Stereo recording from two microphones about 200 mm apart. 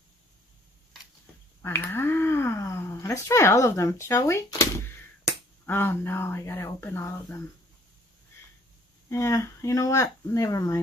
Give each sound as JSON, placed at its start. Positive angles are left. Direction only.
{"t": 1.6, "sound": "speech", "side_deg": 10}
{"t": 9.1, "sound": "speech", "side_deg": 15}